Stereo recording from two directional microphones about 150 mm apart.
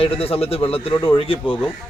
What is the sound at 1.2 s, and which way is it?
Speech, 35° left (ahead or behind).